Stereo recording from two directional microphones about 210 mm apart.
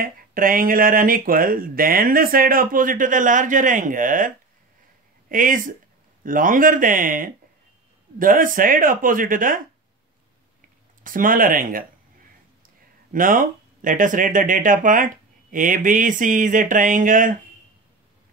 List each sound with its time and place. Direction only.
0.0 s speech: 40° right (ahead or behind)
5.3 s speech: 40° right (ahead or behind)
11.1 s speech: 40° right (ahead or behind)